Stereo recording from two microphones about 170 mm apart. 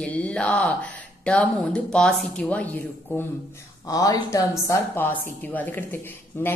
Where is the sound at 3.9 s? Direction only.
20° left (ahead or behind).